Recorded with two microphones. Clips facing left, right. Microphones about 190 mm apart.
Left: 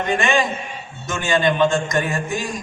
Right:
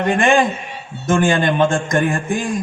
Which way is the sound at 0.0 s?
50° right (ahead or behind).